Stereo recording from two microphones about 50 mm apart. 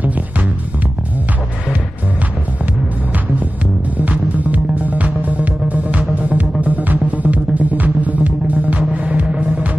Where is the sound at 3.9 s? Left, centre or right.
Right.